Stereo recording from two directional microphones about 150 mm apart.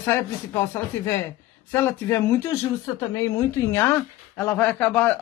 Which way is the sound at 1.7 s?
15° left (ahead or behind).